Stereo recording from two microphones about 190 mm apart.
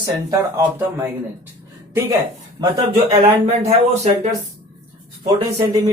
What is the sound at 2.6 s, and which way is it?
Speech, 30° right (ahead or behind).